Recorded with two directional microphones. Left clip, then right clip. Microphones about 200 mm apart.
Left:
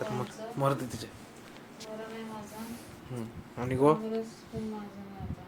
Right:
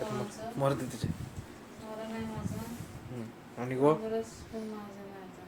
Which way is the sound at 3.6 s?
15° left (ahead or behind).